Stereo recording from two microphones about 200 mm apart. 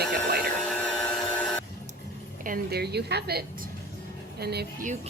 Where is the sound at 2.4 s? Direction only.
50° right (ahead or behind).